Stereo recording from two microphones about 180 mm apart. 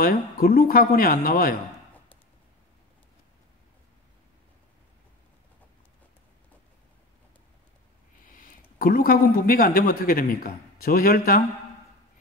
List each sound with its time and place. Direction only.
0.0 s speech: 50° left (ahead or behind)
8.2 s speech: 50° left (ahead or behind)